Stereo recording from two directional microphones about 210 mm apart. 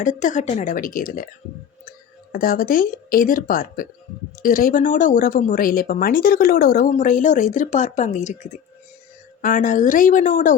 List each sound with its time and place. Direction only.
0.0 s speech: 35° left (ahead or behind)
2.3 s speech: 40° left (ahead or behind)